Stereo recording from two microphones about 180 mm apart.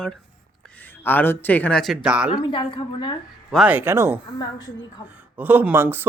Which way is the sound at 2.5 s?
25° left (ahead or behind).